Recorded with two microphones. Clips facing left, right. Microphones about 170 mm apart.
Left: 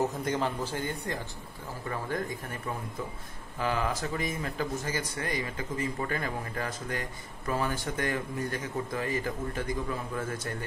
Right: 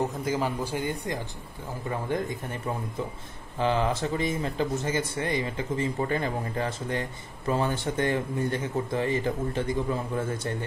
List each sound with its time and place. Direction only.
0.0 s a man's voice: centre (ahead or behind)
0.7 s speech: 15° right (ahead or behind)